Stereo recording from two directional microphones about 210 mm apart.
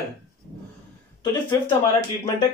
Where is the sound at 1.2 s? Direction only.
20° left (ahead or behind).